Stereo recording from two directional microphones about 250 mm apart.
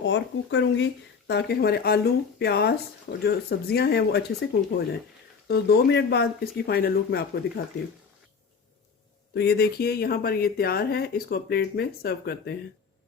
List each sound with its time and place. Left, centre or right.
0.0 s speech: left
5.5 s speech: left
9.3 s speech: left